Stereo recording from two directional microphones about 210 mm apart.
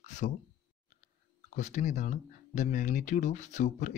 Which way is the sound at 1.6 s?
35° left (ahead or behind).